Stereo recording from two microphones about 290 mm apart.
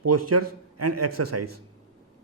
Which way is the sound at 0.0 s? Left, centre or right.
Right.